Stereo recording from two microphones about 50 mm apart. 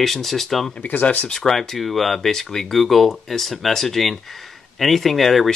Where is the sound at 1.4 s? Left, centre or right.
Centre.